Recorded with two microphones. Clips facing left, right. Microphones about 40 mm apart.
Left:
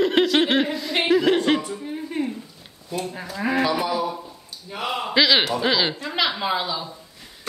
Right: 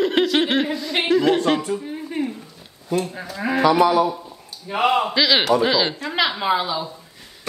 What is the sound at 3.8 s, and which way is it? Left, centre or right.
A man's voice, right.